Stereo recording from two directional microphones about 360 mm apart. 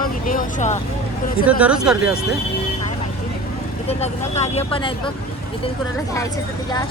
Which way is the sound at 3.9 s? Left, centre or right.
Centre.